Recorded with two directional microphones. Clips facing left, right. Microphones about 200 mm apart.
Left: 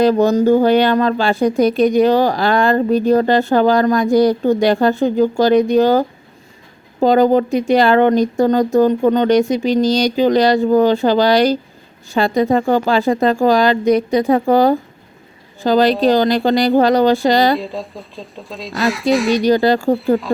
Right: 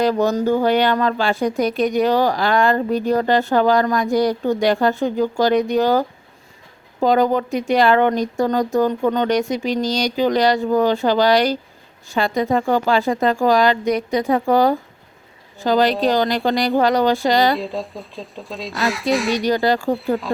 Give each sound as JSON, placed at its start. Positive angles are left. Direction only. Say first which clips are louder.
{"t": 0.0, "sound": "speech", "louder": "left 5 dB", "side_deg": 30}
{"t": 17.6, "sound": "speech", "louder": "even", "side_deg": 0}
{"t": 19.5, "sound": "speech", "louder": "left 5 dB", "side_deg": 30}
{"t": 20.0, "sound": "speech", "louder": "left 5 dB", "side_deg": 0}